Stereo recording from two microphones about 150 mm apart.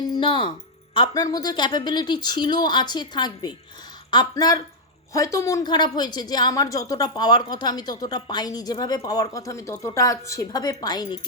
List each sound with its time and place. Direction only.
0.1 s a woman's voice: 35° left (ahead or behind)